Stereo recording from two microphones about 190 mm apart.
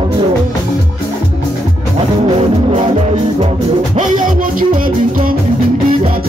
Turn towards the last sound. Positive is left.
turn(degrees=-45)  # may be behind; listen again after turning